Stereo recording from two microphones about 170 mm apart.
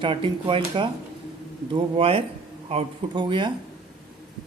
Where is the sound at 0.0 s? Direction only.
30° right (ahead or behind).